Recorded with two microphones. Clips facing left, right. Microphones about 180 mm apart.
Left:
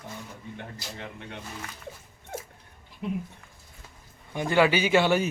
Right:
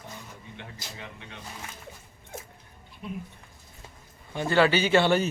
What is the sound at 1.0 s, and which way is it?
Speech, 50° left (ahead or behind).